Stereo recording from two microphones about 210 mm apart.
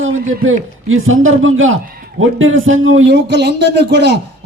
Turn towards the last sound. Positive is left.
turn(degrees=-55)  # may be behind; listen again after turning